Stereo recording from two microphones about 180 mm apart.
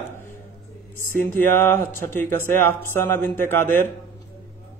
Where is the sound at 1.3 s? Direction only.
10° left (ahead or behind).